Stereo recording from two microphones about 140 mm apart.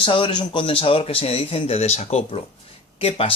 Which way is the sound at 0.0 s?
35° left (ahead or behind).